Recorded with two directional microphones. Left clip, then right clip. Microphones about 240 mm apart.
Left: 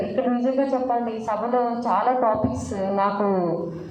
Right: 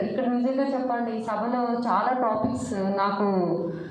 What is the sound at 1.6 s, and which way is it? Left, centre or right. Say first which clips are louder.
Speech: left 3 dB; left.